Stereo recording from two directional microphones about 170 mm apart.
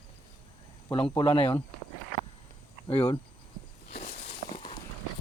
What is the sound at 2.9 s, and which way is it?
Speech, 30° left (ahead or behind).